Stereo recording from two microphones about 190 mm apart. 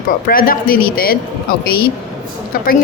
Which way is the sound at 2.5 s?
50° left (ahead or behind).